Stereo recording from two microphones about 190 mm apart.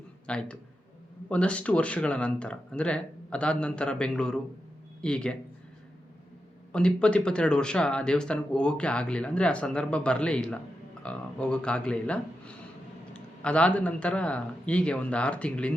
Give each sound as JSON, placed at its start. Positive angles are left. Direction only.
{"t": 0.3, "sound": "speech", "side_deg": 5}
{"t": 6.7, "sound": "speech", "side_deg": 5}